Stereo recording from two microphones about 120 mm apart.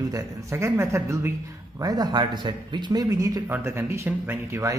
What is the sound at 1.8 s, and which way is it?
A man's voice, 35° right (ahead or behind).